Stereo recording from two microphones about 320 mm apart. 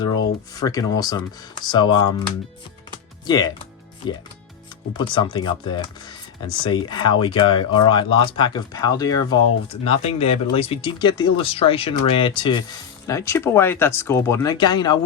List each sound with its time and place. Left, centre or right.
0.5 s speech: centre
3.2 s speech: centre